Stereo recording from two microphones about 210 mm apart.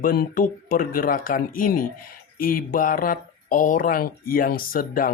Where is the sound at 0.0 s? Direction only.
45° left (ahead or behind).